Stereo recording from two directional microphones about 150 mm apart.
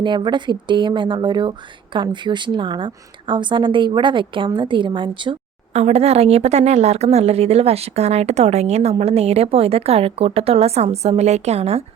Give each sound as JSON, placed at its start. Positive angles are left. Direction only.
{"t": 0.0, "sound": "a woman's voice", "side_deg": -30}
{"t": 5.7, "sound": "a woman's voice", "side_deg": -45}